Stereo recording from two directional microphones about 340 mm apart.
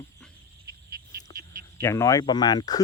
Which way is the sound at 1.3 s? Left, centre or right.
Centre.